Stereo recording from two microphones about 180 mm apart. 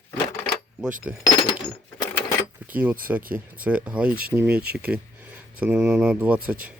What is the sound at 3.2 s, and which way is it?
Speech, 50° right (ahead or behind).